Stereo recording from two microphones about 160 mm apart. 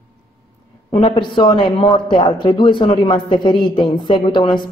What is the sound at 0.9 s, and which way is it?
A man's voice, 30° left (ahead or behind).